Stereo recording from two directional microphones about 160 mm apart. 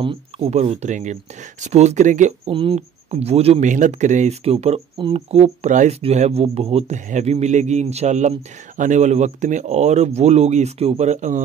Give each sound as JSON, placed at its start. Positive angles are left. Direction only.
{"t": 0.0, "sound": "speech", "side_deg": -30}
{"t": 0.5, "sound": "speech", "side_deg": -45}
{"t": 2.5, "sound": "speech", "side_deg": -35}